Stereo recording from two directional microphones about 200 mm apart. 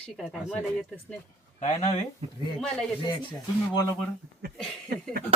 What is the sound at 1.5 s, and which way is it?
Speech, 35° left (ahead or behind).